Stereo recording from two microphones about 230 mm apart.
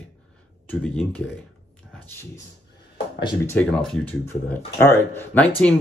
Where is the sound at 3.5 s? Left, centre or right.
Centre.